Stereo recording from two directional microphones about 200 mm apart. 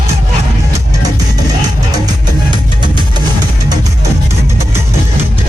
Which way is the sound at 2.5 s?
25° right (ahead or behind).